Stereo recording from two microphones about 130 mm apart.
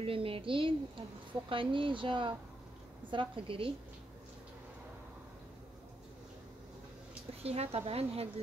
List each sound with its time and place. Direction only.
0.0 s a woman's voice: 45° right (ahead or behind)
7.4 s a woman's voice: 50° right (ahead or behind)